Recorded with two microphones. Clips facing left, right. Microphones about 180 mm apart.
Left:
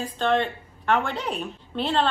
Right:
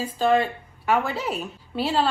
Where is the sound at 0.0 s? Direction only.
5° right (ahead or behind).